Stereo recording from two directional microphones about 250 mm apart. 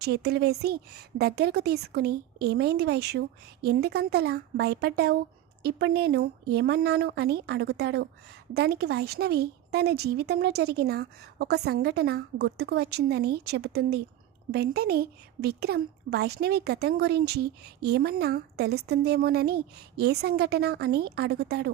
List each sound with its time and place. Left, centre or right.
0.0 s speech: right